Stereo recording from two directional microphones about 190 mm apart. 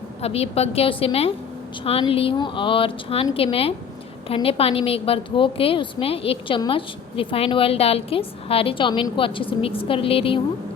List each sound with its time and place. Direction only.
0.2 s a woman's voice: 30° left (ahead or behind)